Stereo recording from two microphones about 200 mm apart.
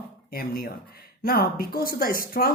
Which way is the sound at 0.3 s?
50° left (ahead or behind).